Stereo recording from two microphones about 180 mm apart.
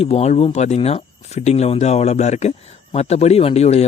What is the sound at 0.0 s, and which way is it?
Speech, 35° left (ahead or behind).